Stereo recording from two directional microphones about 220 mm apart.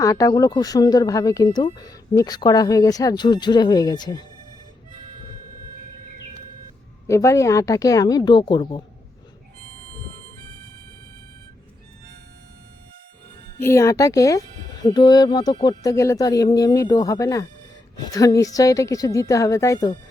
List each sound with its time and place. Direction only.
0.0 s speech: 15° left (ahead or behind)
7.1 s speech: 15° left (ahead or behind)
13.6 s speech: 10° left (ahead or behind)